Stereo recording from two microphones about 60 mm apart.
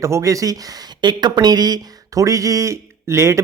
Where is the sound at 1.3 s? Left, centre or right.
Right.